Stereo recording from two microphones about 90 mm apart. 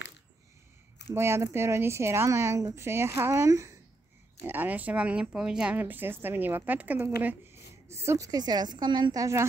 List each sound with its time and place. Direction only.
1.1 s speech: 30° right (ahead or behind)
4.4 s speech: 20° right (ahead or behind)
7.5 s a sound: 30° right (ahead or behind)
8.3 s speech: 50° right (ahead or behind); by 9.5 s 35° right (ahead or behind)